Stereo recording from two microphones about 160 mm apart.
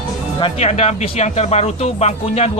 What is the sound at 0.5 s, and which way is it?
Speech, 45° left (ahead or behind).